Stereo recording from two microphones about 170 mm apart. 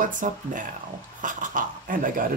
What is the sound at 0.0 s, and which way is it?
Speech, 50° right (ahead or behind).